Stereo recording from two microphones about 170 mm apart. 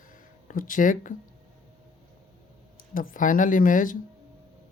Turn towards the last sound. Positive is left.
turn(degrees=50)  # may be behind; listen again after turning